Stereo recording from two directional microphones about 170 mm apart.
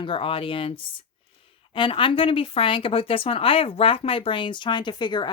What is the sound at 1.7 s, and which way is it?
Speech, 30° left (ahead or behind).